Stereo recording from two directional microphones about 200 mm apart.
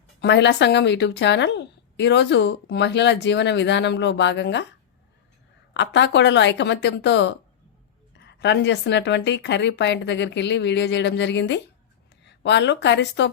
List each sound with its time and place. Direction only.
0.2 s a woman's voice: 60° left (ahead or behind)
5.8 s a woman's voice: 60° left (ahead or behind)